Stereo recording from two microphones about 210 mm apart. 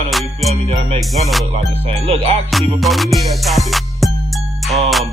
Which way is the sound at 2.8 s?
Centre (ahead or behind).